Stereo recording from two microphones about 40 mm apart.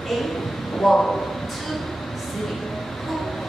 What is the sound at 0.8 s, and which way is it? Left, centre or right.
Speech, centre.